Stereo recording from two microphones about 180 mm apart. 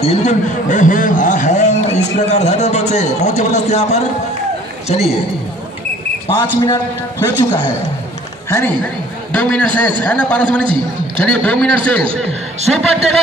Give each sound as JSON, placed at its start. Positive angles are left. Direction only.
{"t": 0.0, "sound": "a man's voice", "side_deg": 40}
{"t": 6.2, "sound": "a man's voice", "side_deg": 25}